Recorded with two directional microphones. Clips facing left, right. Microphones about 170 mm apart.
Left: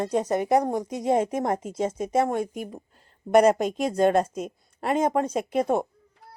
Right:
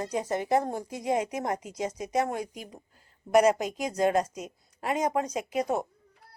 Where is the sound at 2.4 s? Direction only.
55° left (ahead or behind).